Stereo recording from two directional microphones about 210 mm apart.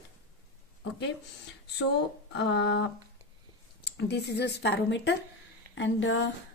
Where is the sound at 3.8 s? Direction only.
50° left (ahead or behind).